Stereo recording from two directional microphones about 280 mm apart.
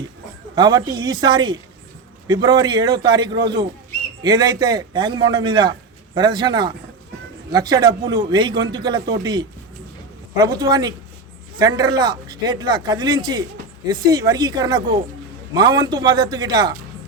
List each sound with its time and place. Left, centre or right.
0.5 s a man's voice: centre